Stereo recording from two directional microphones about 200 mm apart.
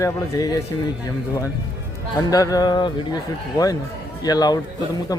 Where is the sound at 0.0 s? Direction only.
15° left (ahead or behind).